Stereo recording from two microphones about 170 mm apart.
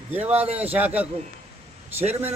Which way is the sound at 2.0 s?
40° right (ahead or behind).